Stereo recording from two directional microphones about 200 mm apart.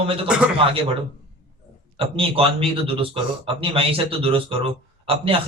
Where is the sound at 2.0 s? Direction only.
25° right (ahead or behind).